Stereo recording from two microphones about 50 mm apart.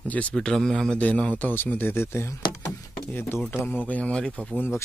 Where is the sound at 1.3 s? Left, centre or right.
Left.